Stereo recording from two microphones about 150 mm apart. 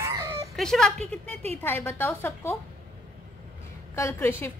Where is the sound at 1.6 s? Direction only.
15° left (ahead or behind).